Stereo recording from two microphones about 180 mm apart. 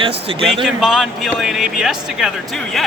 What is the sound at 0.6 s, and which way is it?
Speech, centre (ahead or behind).